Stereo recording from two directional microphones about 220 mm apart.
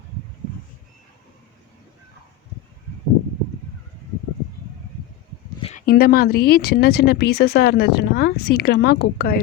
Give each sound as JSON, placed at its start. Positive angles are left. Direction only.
{"t": 5.6, "sound": "speech", "side_deg": 40}